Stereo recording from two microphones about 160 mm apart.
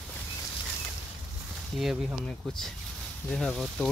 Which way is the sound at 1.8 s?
5° right (ahead or behind).